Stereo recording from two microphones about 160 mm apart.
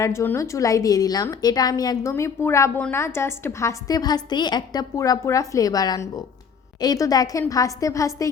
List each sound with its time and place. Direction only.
0.0 s a woman's voice: 15° left (ahead or behind)